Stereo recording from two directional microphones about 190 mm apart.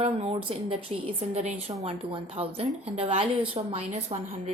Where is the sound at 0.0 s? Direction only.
30° right (ahead or behind).